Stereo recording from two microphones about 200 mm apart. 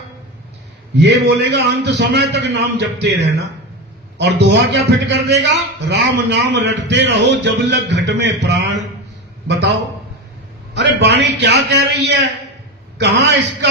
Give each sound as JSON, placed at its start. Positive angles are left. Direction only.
{"t": 0.9, "sound": "a man's voice", "side_deg": -55}
{"t": 10.8, "sound": "a man's voice", "side_deg": -60}